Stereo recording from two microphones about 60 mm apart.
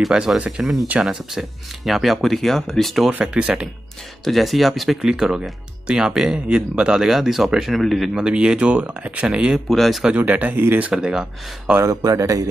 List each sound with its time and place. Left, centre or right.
0.0 s speech: centre
1.9 s speech: centre
3.3 s speech: centre
4.2 s speech: centre
8.1 s speech: centre
9.7 s speech: centre
10.1 s speech: right
10.9 s speech: centre
11.8 s speech: right